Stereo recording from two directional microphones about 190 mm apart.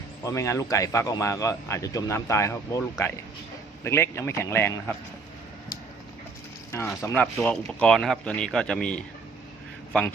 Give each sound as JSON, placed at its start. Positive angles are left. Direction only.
{"t": 0.3, "sound": "a man's voice", "side_deg": 15}
{"t": 3.8, "sound": "a man's voice", "side_deg": 15}
{"t": 6.7, "sound": "speech", "side_deg": 15}